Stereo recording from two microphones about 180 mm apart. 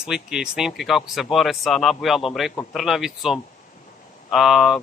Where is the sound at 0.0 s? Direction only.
5° right (ahead or behind).